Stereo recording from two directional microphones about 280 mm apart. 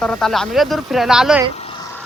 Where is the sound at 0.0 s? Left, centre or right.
Centre.